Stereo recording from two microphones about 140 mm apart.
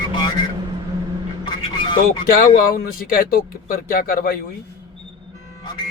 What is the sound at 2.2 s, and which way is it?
Speech, 90° left.